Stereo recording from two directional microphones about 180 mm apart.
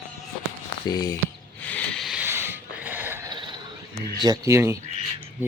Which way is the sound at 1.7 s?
5° left (ahead or behind).